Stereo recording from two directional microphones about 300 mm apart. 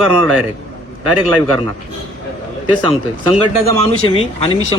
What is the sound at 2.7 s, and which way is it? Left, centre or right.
A man's voice, centre.